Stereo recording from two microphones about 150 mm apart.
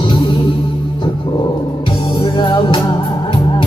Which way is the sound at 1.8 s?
30° left (ahead or behind).